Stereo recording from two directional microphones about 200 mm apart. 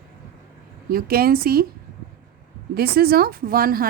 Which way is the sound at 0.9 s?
50° right (ahead or behind).